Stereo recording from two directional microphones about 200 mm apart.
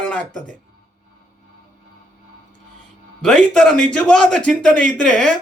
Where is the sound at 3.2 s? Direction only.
Centre (ahead or behind).